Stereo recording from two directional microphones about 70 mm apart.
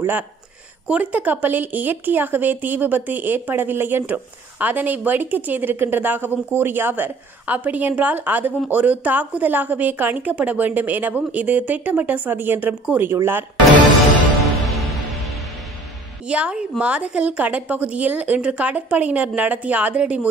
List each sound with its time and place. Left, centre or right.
0.8 s speech: centre
16.3 s speech: centre